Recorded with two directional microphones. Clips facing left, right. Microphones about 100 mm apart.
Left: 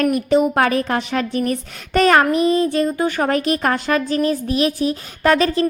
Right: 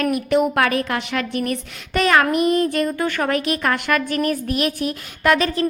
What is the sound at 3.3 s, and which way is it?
A woman's voice, 35° left (ahead or behind).